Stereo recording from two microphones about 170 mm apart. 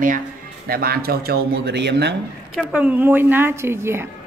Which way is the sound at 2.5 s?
10° right (ahead or behind).